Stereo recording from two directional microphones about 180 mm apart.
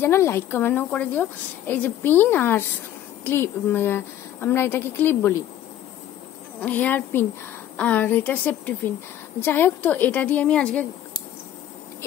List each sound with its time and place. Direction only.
0.0 s a woman's voice: 15° left (ahead or behind)
6.6 s a woman's voice: 10° left (ahead or behind)